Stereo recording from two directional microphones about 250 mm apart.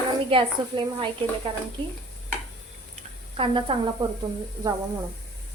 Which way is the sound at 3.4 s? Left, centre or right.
Right.